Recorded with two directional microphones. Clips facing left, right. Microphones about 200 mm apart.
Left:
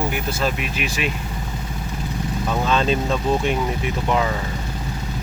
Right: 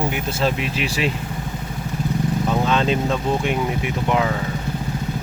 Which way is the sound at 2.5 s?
15° right (ahead or behind).